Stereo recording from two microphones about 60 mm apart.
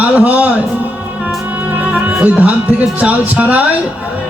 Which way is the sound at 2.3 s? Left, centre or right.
Right.